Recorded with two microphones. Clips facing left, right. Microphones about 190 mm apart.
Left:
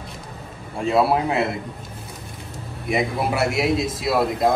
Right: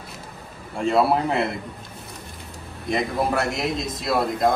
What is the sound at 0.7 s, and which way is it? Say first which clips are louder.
Speech: left 1 dB; centre (ahead or behind).